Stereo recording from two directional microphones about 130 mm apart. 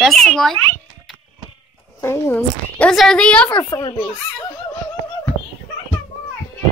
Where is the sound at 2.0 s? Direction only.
20° left (ahead or behind).